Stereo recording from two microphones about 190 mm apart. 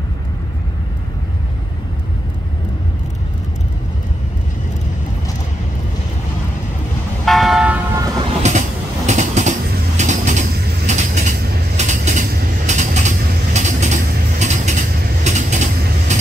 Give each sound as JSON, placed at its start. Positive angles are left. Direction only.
{"t": 7.2, "sound": "vehicle", "side_deg": 0}
{"t": 8.4, "sound": "train", "side_deg": -40}
{"t": 9.9, "sound": "vehicle", "side_deg": -40}
{"t": 10.9, "sound": "train", "side_deg": -40}
{"t": 12.6, "sound": "mechanisms", "side_deg": -40}
{"t": 16.1, "sound": "vehicle", "side_deg": -40}